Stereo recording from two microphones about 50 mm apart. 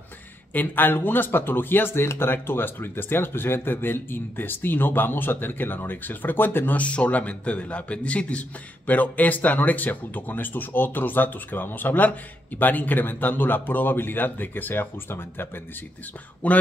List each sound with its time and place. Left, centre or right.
0.5 s speech: left
6.8 s a man's voice: left
16.4 s speech: left